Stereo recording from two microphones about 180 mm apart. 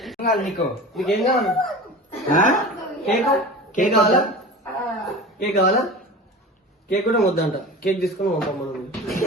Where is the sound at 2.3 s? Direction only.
45° left (ahead or behind).